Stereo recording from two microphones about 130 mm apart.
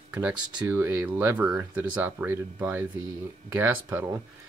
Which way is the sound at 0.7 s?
20° right (ahead or behind).